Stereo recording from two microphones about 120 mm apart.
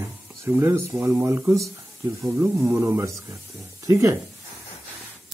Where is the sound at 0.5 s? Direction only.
25° right (ahead or behind).